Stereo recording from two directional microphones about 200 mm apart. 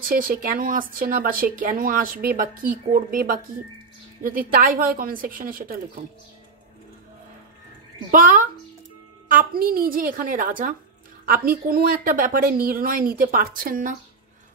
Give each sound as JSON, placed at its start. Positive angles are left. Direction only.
{"t": 0.0, "sound": "speech", "side_deg": -45}
{"t": 9.3, "sound": "speech", "side_deg": -45}